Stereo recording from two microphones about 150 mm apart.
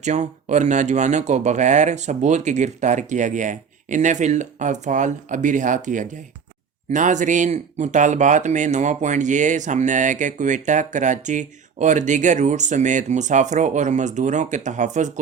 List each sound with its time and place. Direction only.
0.0 s speech: 50° right (ahead or behind)